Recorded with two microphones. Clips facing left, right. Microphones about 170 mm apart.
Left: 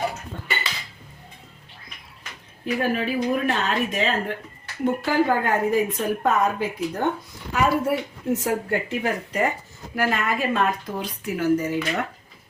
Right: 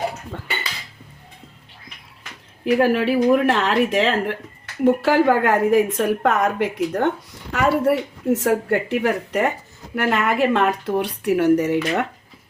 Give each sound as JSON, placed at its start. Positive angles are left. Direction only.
{"t": 0.3, "sound": "dishes", "side_deg": -90}
{"t": 2.6, "sound": "a woman's voice", "side_deg": -75}